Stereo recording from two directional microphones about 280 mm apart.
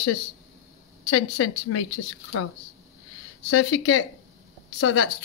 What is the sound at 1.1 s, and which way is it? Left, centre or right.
Speech, left.